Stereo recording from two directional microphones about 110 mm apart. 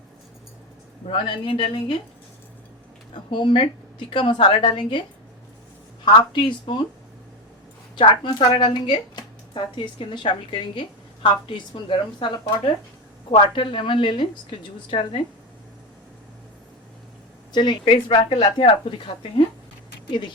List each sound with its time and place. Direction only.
1.0 s speech: 50° left (ahead or behind)
3.2 s speech: 50° left (ahead or behind)
6.3 s speech: 45° left (ahead or behind)
7.9 s a woman's voice: 50° left (ahead or behind)
17.5 s speech: 40° left (ahead or behind)